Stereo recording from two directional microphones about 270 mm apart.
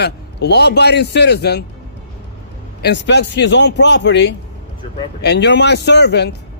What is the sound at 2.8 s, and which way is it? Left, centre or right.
A man's voice, left.